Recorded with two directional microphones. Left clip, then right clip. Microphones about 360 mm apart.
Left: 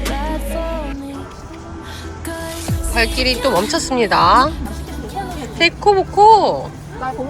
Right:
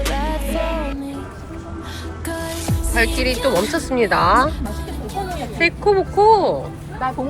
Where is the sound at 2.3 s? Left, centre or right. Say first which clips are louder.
Even; centre.